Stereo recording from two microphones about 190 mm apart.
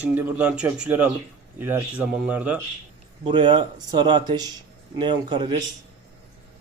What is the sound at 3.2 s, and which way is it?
Speech, 25° right (ahead or behind).